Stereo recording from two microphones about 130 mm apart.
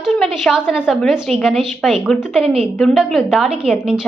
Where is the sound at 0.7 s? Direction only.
5° right (ahead or behind).